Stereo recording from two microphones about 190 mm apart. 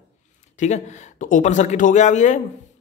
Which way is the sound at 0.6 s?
40° left (ahead or behind).